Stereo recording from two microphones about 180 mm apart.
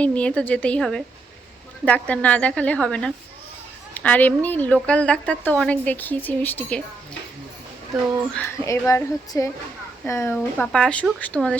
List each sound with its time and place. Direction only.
0.0 s a woman's voice: 5° left (ahead or behind)
8.3 s a woman's voice: 10° left (ahead or behind)
10.3 s a woman's voice: 5° left (ahead or behind)